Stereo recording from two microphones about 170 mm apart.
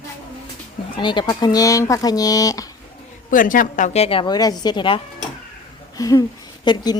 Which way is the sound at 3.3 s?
50° left (ahead or behind).